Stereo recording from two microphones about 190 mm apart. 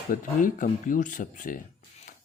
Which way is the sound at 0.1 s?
45° left (ahead or behind).